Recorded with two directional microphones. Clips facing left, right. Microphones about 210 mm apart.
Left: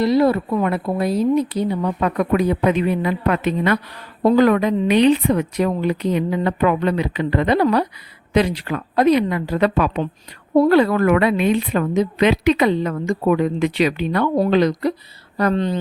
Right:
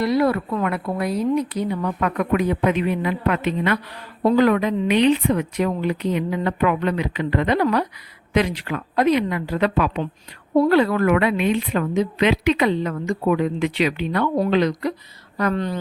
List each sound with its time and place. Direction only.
0.0 s a woman's voice: 25° left (ahead or behind)